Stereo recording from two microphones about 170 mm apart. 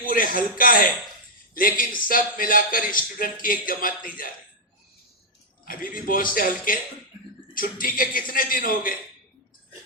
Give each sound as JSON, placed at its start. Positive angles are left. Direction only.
{"t": 0.0, "sound": "speech", "side_deg": 55}
{"t": 5.6, "sound": "speech", "side_deg": 55}